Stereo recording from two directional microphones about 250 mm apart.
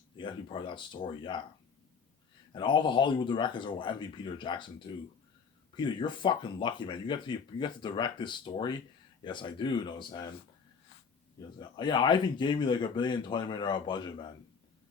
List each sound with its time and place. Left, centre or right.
0.2 s speech: centre
2.5 s speech: centre
5.7 s speech: centre
11.6 s speech: centre